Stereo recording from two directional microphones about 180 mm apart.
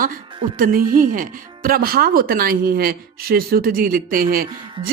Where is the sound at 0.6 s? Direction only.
50° right (ahead or behind).